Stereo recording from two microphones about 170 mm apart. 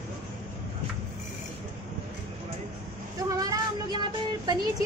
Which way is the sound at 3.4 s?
20° right (ahead or behind).